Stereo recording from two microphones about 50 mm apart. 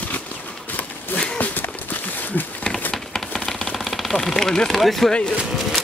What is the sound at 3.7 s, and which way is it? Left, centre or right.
Engine, centre.